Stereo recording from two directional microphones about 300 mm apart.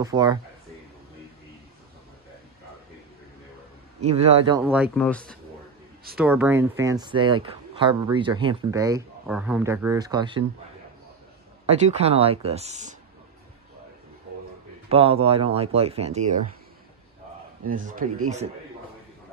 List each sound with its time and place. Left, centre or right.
0.0 s speech: centre
4.0 s speech: right
4.9 s speech: centre
11.6 s speech: right
14.9 s speech: centre
17.6 s speech: right